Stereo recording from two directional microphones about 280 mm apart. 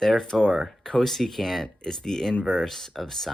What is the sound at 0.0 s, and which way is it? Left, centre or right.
Speech, centre.